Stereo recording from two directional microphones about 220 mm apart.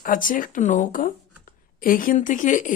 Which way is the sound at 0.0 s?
35° left (ahead or behind).